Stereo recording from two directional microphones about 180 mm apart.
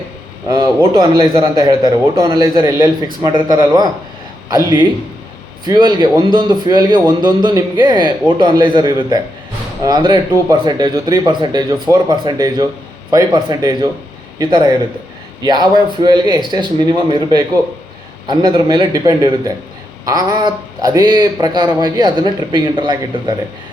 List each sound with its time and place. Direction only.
0.4 s a man's voice: 20° right (ahead or behind)